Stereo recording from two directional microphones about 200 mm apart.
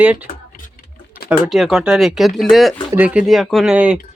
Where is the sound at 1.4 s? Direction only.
Centre (ahead or behind).